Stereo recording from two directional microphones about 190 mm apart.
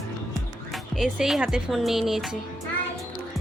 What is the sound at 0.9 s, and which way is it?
Speech, centre (ahead or behind).